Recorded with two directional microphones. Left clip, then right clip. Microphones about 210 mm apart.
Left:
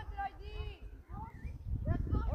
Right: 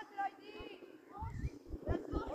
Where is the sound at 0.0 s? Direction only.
45° left (ahead or behind).